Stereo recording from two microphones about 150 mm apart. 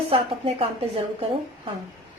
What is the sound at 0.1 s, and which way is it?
Speech, 40° right (ahead or behind).